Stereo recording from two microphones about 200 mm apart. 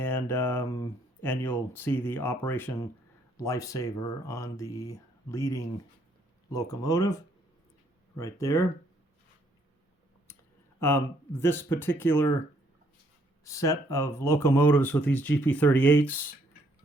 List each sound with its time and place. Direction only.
0.0 s speech: 10° left (ahead or behind)
8.2 s speech: 15° left (ahead or behind)
10.8 s speech: 10° left (ahead or behind)
13.4 s speech: 15° left (ahead or behind)